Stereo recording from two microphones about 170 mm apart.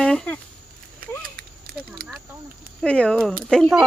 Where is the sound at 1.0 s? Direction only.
60° right (ahead or behind).